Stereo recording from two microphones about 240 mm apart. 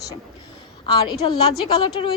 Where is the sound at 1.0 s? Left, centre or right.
Centre.